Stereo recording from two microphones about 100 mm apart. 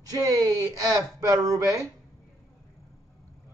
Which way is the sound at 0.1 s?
35° right (ahead or behind).